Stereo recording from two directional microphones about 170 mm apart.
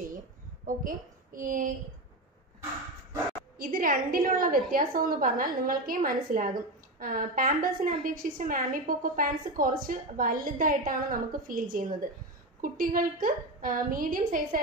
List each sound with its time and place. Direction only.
0.7 s a woman's voice: 50° right (ahead or behind)
3.5 s a woman's voice: 55° right (ahead or behind)